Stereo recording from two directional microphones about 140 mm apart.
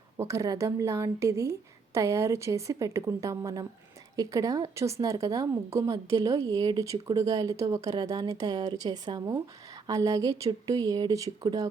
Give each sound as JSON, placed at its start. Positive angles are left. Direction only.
{"t": 0.2, "sound": "a woman's voice", "side_deg": -20}